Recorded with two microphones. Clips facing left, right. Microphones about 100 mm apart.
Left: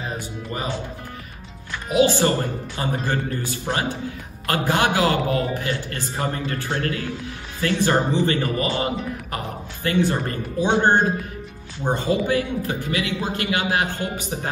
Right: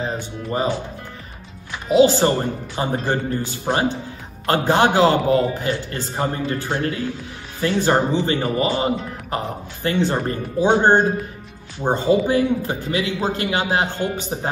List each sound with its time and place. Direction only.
0.0 s speech: 30° right (ahead or behind)
2.0 s a man's voice: 20° right (ahead or behind)